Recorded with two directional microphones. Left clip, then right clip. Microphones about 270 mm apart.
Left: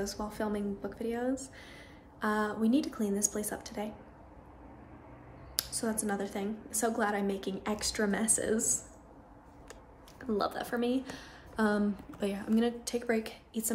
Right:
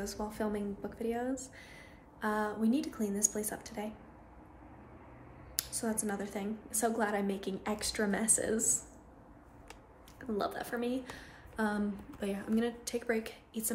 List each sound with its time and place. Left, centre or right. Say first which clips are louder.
0.0 s a woman's voice: left 2 dB; centre
5.6 s a woman's voice: left 2 dB; centre
10.2 s a woman's voice: left 3 dB; centre